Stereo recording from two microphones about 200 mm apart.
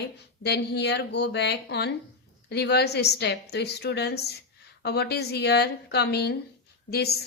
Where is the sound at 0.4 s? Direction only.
55° left (ahead or behind).